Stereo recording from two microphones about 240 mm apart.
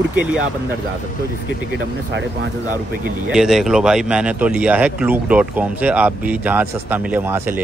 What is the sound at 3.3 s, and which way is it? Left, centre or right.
Speech, centre.